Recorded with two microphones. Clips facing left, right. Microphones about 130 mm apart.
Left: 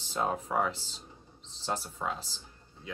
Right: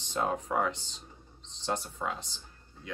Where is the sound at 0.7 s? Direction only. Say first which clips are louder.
Right 1 dB; 35° left (ahead or behind).